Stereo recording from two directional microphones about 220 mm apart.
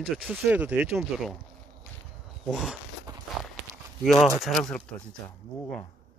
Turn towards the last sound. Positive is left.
turn(degrees=5)  # may be behind; listen again after turning